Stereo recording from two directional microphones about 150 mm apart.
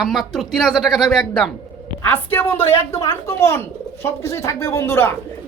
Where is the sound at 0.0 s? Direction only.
Centre (ahead or behind).